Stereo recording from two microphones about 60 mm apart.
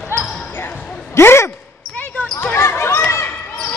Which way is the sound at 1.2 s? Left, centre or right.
Left.